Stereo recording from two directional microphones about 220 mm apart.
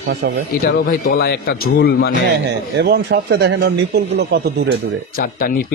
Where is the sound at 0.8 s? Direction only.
45° left (ahead or behind).